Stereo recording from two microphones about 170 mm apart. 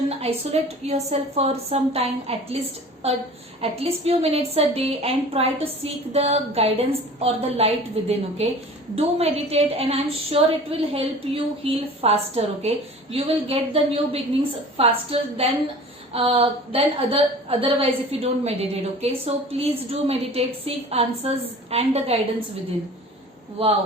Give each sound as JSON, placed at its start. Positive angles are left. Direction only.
{"t": 0.1, "sound": "a woman's voice", "side_deg": -35}
{"t": 23.6, "sound": "a woman's voice", "side_deg": -35}